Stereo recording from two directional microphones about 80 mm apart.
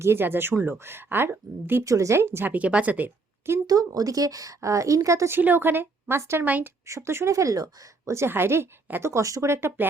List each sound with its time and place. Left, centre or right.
0.0 s speech: right
1.8 s speech: right
2.5 s speech: centre
3.7 s a woman's voice: right
5.4 s speech: right
6.4 s speech: right
6.8 s speech: right
8.1 s speech: right